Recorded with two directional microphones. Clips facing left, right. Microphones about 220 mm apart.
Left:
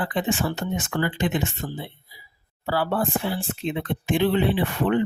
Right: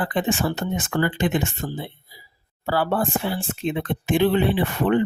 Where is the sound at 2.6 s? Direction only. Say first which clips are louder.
Right 2 dB; 50° right (ahead or behind).